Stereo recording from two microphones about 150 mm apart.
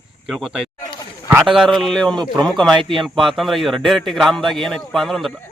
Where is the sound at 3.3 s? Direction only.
Centre (ahead or behind).